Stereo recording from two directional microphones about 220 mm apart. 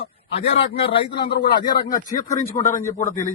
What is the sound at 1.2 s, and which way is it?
Speech, 40° left (ahead or behind).